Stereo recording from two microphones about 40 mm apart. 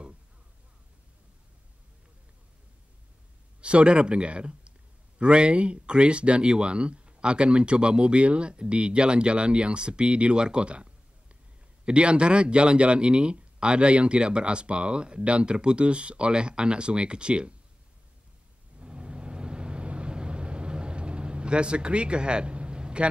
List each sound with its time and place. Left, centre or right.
3.6 s speech: right
18.8 s vehicle: right